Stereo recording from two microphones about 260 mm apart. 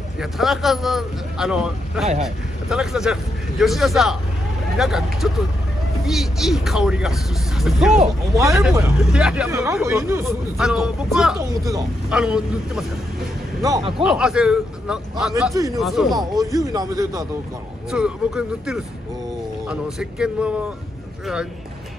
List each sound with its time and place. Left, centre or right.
0.2 s speech: centre
13.6 s speech: centre
14.0 s speech: centre
15.8 s speech: centre
16.5 s speech: centre